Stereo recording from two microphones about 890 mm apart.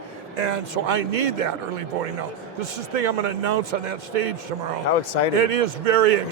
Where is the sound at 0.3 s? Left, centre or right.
Right.